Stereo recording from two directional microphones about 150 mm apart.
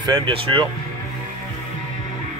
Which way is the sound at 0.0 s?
35° right (ahead or behind).